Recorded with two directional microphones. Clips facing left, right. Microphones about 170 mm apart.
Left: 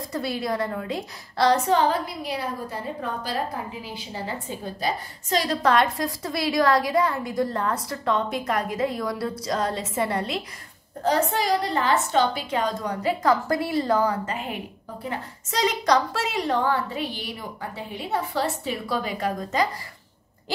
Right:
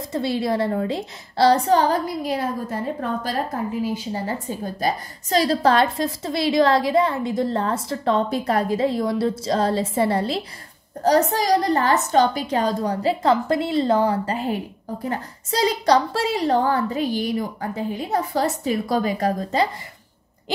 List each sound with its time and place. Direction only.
0.1 s a woman's voice: 25° right (ahead or behind)